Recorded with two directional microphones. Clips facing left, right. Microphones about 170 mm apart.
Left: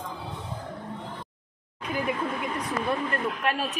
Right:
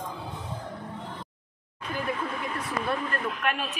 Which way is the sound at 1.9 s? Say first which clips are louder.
Left 2 dB; 15° left (ahead or behind).